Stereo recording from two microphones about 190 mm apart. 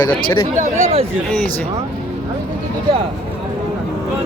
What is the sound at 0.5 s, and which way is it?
Speech, 40° right (ahead or behind).